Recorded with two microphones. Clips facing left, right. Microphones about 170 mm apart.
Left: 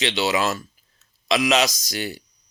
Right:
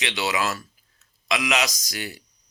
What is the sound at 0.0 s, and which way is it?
Speech, 25° left (ahead or behind).